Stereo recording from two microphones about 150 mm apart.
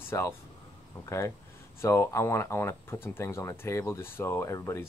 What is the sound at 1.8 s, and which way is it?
Speech, 15° left (ahead or behind).